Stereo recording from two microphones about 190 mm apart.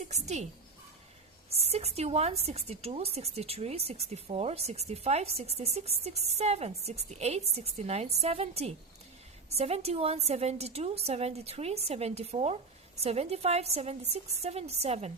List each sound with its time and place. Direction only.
0.0 s a woman's voice: 35° right (ahead or behind)
1.5 s speech: 35° right (ahead or behind)